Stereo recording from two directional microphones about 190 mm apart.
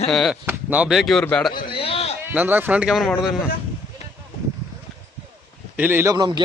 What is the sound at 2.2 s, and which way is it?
Speech, 10° right (ahead or behind).